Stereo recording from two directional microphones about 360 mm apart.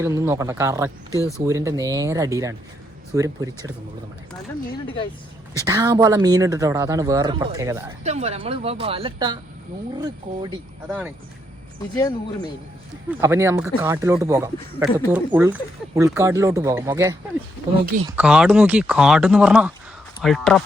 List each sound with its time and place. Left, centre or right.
0.0 s speech: centre
1.1 s speech: centre
1.5 s speech: centre
5.6 s speech: centre
10.8 s speech: centre
13.1 s speech: centre
18.2 s speech: centre